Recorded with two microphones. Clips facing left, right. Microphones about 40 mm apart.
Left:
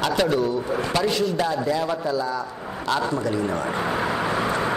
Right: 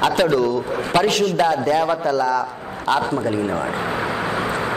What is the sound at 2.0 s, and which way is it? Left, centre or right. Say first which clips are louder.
Speech: right 6 dB; right.